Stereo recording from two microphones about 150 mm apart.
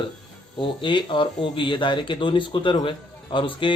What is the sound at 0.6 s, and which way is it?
A man's voice, 35° left (ahead or behind).